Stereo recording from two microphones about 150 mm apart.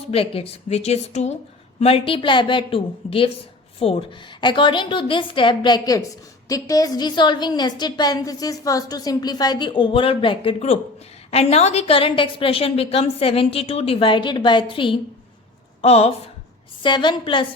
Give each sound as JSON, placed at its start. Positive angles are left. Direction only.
{"t": 0.1, "sound": "a woman's voice", "side_deg": 40}
{"t": 16.8, "sound": "a woman's voice", "side_deg": 30}